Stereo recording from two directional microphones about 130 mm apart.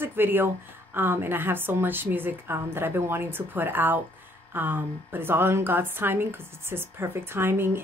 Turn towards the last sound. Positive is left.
turn(degrees=-15)  # may be behind; listen again after turning